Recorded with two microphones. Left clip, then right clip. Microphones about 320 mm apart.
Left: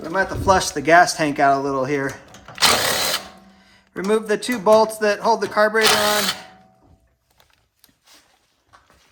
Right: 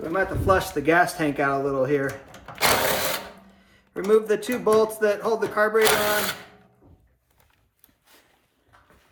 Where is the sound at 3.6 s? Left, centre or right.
Left.